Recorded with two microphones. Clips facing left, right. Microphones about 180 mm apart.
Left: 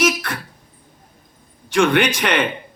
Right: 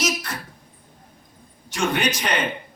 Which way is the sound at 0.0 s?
55° left (ahead or behind).